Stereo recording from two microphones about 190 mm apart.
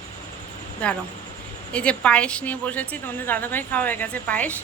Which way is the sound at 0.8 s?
5° left (ahead or behind).